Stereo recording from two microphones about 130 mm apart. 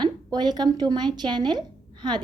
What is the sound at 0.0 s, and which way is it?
A woman's voice, 35° right (ahead or behind).